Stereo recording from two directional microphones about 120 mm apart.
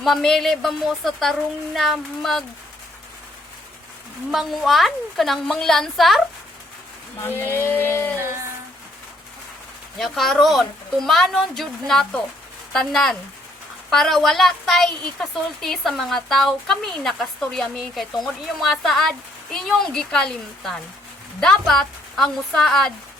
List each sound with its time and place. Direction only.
0.0 s a woman's voice: 5° left (ahead or behind)
4.3 s a woman's voice: centre (ahead or behind)
7.2 s a sound: 20° left (ahead or behind)
10.0 s a woman's voice: centre (ahead or behind)